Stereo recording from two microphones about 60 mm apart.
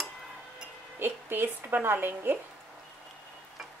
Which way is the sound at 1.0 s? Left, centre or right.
Right.